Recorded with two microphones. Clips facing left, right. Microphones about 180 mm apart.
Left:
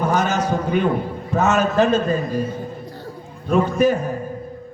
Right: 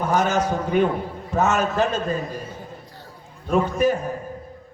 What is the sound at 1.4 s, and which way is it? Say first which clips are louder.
A man's voice: left 3 dB; 80° left.